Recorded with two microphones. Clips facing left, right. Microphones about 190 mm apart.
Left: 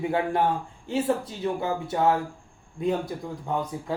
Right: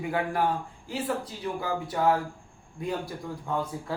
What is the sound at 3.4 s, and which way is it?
Speech, 20° left (ahead or behind).